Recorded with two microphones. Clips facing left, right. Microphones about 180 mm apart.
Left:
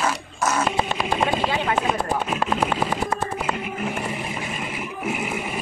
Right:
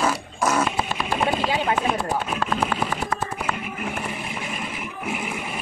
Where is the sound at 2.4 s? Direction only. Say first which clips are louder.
Left 2 dB; 15° left (ahead or behind).